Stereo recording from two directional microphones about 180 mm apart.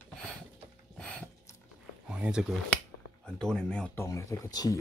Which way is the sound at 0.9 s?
5° left (ahead or behind).